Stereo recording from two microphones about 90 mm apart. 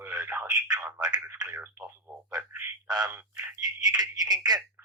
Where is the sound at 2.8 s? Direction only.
50° right (ahead or behind).